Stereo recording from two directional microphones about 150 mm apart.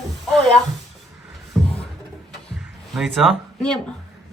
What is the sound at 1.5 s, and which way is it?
Beatboxing, centre (ahead or behind).